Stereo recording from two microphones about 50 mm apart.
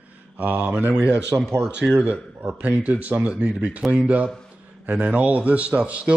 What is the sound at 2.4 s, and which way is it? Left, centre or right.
Speech, right.